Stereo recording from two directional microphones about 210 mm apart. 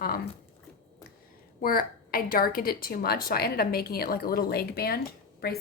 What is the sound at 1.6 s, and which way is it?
A woman's voice, 45° left (ahead or behind).